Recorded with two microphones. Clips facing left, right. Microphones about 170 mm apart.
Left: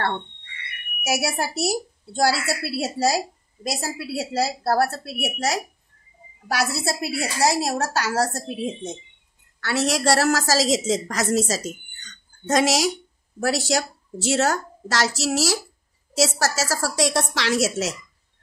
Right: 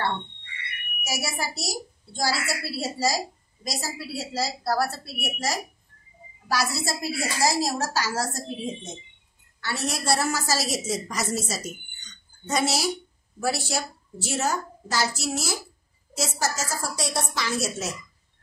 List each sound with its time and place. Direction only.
1.0 s a woman's voice: 70° left (ahead or behind)
6.5 s a woman's voice: 60° left (ahead or behind)
9.6 s a woman's voice: 80° left
13.4 s a woman's voice: 80° left